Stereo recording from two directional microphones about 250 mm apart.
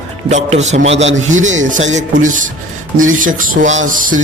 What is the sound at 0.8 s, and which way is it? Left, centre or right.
Speech, right.